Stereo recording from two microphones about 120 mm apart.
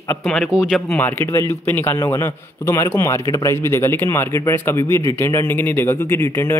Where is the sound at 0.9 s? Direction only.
15° left (ahead or behind).